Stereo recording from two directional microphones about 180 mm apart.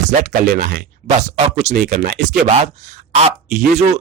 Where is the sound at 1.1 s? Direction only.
40° right (ahead or behind).